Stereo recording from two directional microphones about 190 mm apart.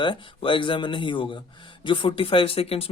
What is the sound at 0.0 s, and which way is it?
Speech, 25° left (ahead or behind).